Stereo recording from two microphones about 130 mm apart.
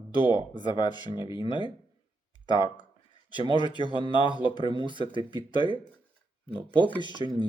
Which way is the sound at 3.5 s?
35° left (ahead or behind).